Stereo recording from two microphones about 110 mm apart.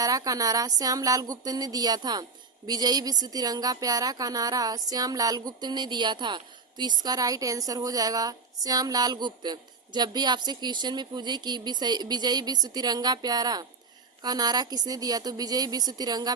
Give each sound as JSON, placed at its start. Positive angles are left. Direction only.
{"t": 0.0, "sound": "speech", "side_deg": -35}